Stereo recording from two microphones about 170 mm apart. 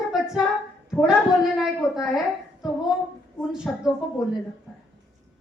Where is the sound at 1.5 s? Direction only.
Centre (ahead or behind).